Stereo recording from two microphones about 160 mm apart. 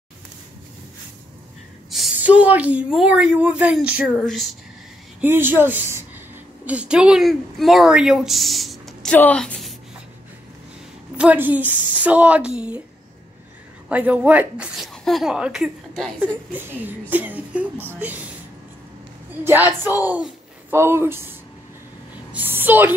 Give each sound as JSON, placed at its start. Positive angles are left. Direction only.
{"t": 1.9, "sound": "a woman's voice", "side_deg": -5}
{"t": 4.1, "sound": "speech", "side_deg": 5}
{"t": 5.2, "sound": "a woman's voice", "side_deg": -10}
{"t": 11.1, "sound": "a woman's voice", "side_deg": -10}
{"t": 13.8, "sound": "a woman's voice", "side_deg": -10}
{"t": 19.4, "sound": "a woman's voice", "side_deg": -15}